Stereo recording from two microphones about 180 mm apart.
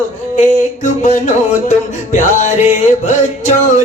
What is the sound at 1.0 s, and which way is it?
Music, 40° left (ahead or behind).